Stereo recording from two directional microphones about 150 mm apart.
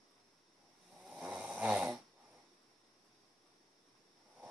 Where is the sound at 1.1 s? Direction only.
5° right (ahead or behind).